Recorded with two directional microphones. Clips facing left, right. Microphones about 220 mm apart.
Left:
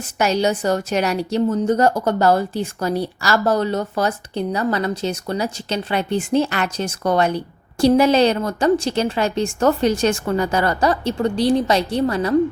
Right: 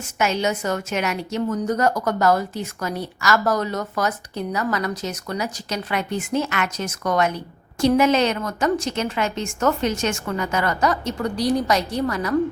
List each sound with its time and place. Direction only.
0.2 s a woman's voice: 35° left (ahead or behind)